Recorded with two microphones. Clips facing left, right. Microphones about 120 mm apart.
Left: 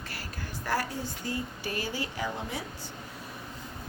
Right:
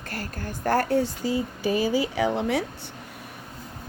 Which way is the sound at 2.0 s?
75° right (ahead or behind).